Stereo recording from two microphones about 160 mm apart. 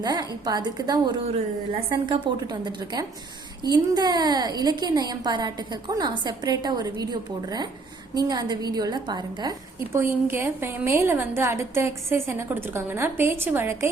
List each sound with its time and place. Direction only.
0.0 s a woman's voice: 25° right (ahead or behind)